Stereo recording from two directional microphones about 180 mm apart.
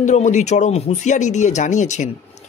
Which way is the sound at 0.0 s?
40° left (ahead or behind).